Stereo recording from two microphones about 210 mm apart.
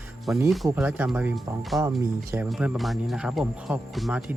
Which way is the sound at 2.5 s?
5° right (ahead or behind).